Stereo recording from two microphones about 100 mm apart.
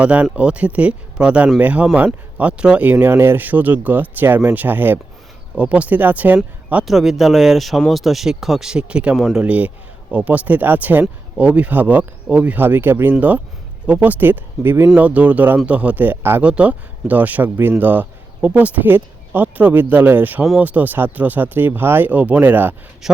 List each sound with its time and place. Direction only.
0.0 s speech: 10° right (ahead or behind)
6.8 s speech: centre (ahead or behind); by 22.7 s 20° right (ahead or behind)
23.0 s speech: 5° right (ahead or behind)